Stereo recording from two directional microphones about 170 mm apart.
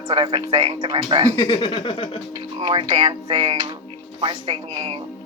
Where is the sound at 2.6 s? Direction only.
30° right (ahead or behind).